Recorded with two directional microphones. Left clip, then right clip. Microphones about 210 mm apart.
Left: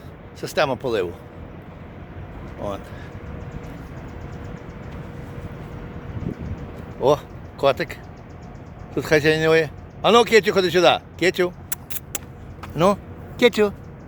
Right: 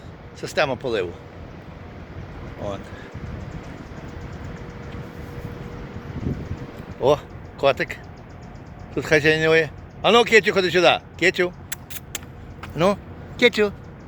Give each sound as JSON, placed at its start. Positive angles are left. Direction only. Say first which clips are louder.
{"t": 0.4, "sound": "speech", "louder": "left 1 dB", "side_deg": 10}
{"t": 2.6, "sound": "speech", "louder": "left 1 dB", "side_deg": 10}
{"t": 7.0, "sound": "speech", "louder": "even", "side_deg": 5}
{"t": 9.0, "sound": "speech", "louder": "even", "side_deg": 5}